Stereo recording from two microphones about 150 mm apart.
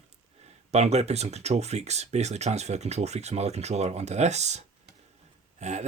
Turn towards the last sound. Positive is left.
turn(degrees=-50)  # may be behind; listen again after turning